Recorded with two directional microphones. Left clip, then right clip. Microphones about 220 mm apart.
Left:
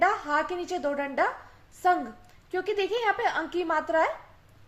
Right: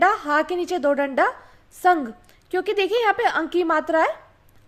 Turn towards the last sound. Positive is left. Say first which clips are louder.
# right 5 dB
turn(degrees=-55)  # may be behind; listen again after turning